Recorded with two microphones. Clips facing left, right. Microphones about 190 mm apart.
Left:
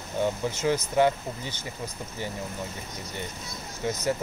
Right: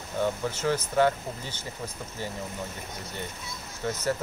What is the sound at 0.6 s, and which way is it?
Speech, 15° left (ahead or behind).